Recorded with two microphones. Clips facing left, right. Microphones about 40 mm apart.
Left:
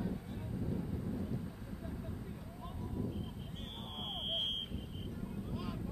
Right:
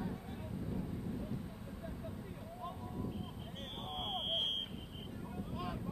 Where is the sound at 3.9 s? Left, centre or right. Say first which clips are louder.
Right 2 dB; centre.